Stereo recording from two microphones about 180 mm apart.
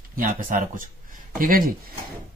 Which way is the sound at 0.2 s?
50° right (ahead or behind).